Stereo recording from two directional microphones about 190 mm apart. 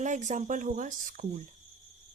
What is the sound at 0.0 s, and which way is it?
A woman's voice, 40° right (ahead or behind).